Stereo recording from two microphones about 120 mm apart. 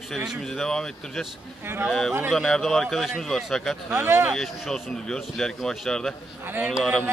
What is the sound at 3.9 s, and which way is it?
Speech, 20° right (ahead or behind).